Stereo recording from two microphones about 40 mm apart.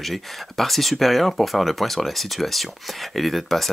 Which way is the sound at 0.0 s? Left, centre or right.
Centre.